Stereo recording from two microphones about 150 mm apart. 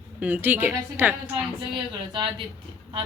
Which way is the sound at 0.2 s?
10° right (ahead or behind).